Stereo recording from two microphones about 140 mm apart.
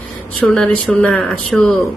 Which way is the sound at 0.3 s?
5° left (ahead or behind).